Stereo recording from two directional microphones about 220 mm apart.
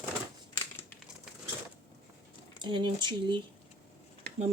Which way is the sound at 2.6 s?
20° right (ahead or behind).